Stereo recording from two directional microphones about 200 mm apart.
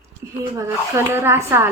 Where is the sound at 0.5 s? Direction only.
15° right (ahead or behind).